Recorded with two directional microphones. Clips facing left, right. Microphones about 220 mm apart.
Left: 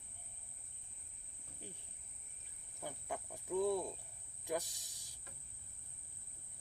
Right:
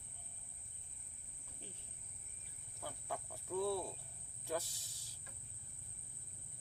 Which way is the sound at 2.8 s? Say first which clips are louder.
Left 2 dB; 20° left (ahead or behind).